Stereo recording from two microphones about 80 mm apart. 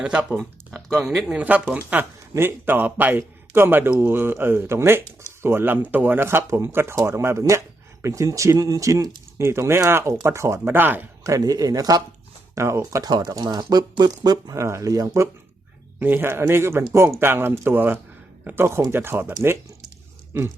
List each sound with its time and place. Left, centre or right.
0.0 s speech: centre
0.7 s speech: centre
1.4 s speech: centre
2.3 s speech: right
9.4 s speech: right
10.8 s speech: right
11.2 s speech: right
12.5 s speech: right
12.9 s speech: right
14.5 s speech: right
16.0 s speech: right
20.3 s speech: right